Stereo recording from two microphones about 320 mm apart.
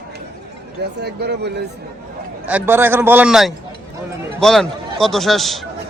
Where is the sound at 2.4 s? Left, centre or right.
Centre.